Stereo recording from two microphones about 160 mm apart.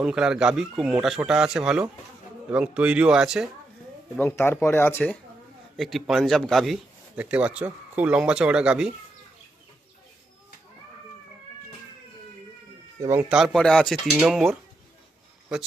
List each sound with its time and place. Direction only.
0.0 s a man's voice: 5° right (ahead or behind)
4.2 s speech: 15° left (ahead or behind)
5.7 s a man's voice: centre (ahead or behind)
13.0 s speech: 20° right (ahead or behind)
13.2 s a man's voice: 5° right (ahead or behind)